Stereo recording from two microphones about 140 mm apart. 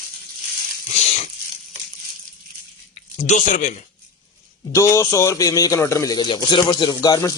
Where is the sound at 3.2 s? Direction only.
60° left (ahead or behind).